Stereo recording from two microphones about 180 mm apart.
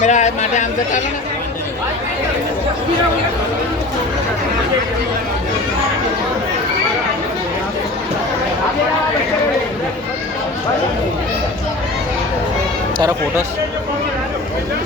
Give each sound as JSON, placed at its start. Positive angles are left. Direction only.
{"t": 0.0, "sound": "speech", "side_deg": 40}